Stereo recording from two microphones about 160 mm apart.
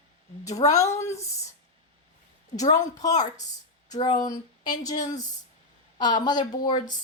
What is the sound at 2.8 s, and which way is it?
A woman's voice, 25° left (ahead or behind).